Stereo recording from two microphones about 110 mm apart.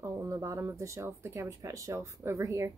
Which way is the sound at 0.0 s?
30° right (ahead or behind).